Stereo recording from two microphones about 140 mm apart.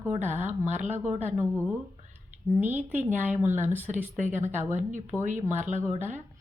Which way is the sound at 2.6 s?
15° right (ahead or behind).